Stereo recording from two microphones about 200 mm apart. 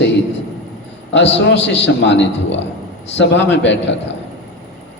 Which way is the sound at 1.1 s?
65° left (ahead or behind).